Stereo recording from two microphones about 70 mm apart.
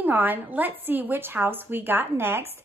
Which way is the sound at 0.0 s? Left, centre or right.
Right.